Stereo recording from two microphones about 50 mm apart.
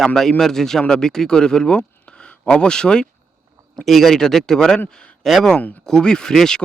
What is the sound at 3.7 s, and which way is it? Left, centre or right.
Speech, centre.